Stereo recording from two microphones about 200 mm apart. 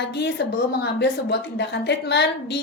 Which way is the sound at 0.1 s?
55° left (ahead or behind).